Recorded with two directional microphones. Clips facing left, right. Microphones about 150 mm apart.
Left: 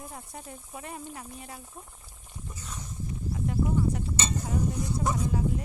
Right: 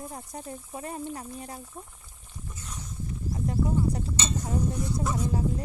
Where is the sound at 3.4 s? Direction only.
35° right (ahead or behind).